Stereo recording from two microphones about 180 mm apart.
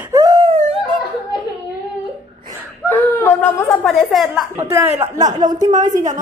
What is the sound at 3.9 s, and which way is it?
Speech, centre (ahead or behind).